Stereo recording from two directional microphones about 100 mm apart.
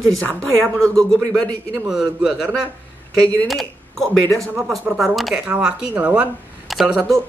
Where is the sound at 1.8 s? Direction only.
5° right (ahead or behind).